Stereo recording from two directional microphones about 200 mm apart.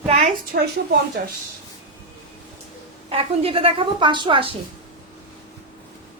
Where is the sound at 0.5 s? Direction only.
50° right (ahead or behind).